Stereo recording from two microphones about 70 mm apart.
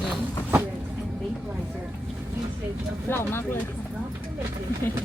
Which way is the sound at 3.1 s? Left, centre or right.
Left.